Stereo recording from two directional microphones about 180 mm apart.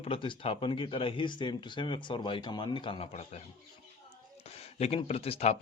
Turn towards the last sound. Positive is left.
turn(degrees=35)  # may be behind; listen again after turning